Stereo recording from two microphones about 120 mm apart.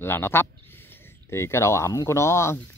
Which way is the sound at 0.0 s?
20° left (ahead or behind).